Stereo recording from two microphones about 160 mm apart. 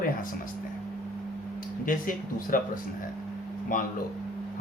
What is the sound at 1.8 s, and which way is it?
Speech, 60° left (ahead or behind).